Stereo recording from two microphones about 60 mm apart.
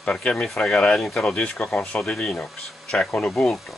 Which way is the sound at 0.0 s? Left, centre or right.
Centre.